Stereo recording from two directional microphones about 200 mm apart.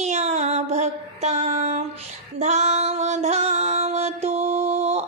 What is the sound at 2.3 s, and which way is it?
Female singing, 35° right (ahead or behind).